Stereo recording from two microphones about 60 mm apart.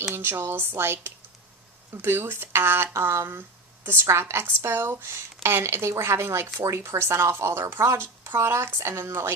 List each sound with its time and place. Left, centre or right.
0.1 s speech: right